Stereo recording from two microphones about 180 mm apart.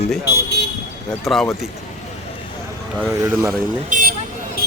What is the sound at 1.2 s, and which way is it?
Speech, centre (ahead or behind).